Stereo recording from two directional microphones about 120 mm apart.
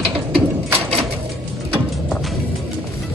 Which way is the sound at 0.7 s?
55° right (ahead or behind).